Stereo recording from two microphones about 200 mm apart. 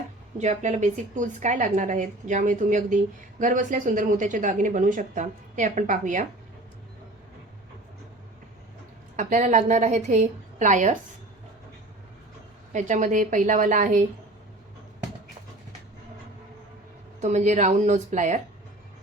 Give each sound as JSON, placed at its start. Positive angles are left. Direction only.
{"t": 0.3, "sound": "a woman's voice", "side_deg": -35}
{"t": 9.1, "sound": "a woman's voice", "side_deg": -40}
{"t": 12.7, "sound": "a woman's voice", "side_deg": -40}
{"t": 17.2, "sound": "a woman's voice", "side_deg": -35}